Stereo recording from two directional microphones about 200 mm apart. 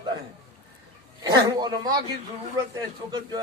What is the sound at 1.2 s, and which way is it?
A man's voice, 20° right (ahead or behind).